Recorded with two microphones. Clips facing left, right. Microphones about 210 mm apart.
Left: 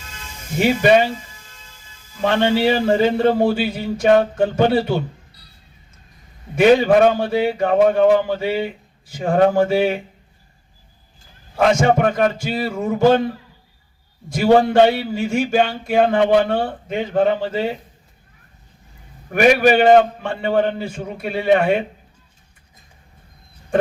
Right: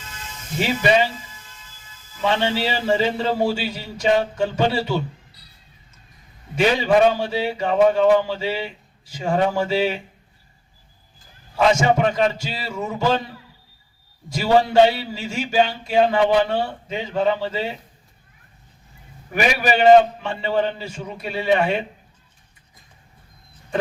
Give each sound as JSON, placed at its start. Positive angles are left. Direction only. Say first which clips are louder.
{"t": 0.6, "sound": "a man's voice", "louder": "left 5 dB", "side_deg": 55}
{"t": 2.2, "sound": "a man's voice", "louder": "left 5 dB", "side_deg": 55}
{"t": 6.6, "sound": "a man's voice", "louder": "left 4 dB", "side_deg": 55}
{"t": 11.5, "sound": "a man's voice", "louder": "left 2 dB", "side_deg": 55}
{"t": 14.3, "sound": "a man's voice", "louder": "left 3 dB", "side_deg": 55}
{"t": 19.3, "sound": "a man's voice", "louder": "left 7 dB", "side_deg": 55}